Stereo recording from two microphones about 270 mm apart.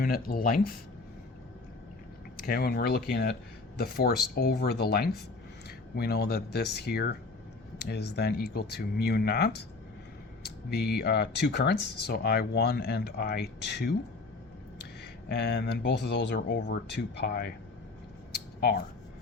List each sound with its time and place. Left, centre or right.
0.0 s speech: left
2.3 s speech: left
15.3 s speech: left